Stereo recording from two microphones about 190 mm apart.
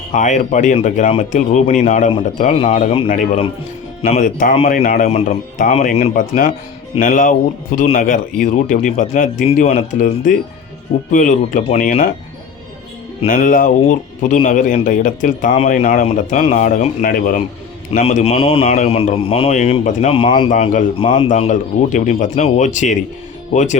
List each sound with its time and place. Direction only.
0.1 s a man's voice: 40° left (ahead or behind)
13.2 s a man's voice: 45° left (ahead or behind)
18.0 s a man's voice: 35° left (ahead or behind)
20.5 s a man's voice: 40° left (ahead or behind)
21.0 s a man's voice: 30° left (ahead or behind)